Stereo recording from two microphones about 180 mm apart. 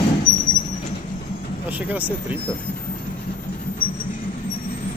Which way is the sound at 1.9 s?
10° right (ahead or behind).